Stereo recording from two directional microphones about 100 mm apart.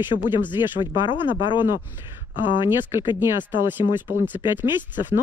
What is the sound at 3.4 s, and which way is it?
Speech, 20° right (ahead or behind).